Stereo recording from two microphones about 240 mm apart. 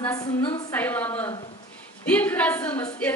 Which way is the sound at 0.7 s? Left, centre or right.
Centre.